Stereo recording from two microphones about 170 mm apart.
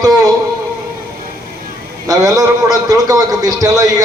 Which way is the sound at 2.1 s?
20° right (ahead or behind).